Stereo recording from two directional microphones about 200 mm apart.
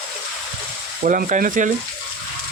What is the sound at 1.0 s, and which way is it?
Speech, 40° right (ahead or behind).